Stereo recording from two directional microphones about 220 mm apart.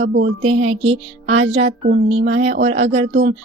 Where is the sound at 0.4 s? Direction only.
30° right (ahead or behind).